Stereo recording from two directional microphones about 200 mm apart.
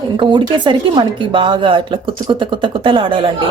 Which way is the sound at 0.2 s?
25° right (ahead or behind).